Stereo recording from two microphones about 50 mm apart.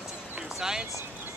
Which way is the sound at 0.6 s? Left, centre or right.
Centre.